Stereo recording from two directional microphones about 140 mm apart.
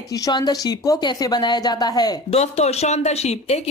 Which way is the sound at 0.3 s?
30° left (ahead or behind).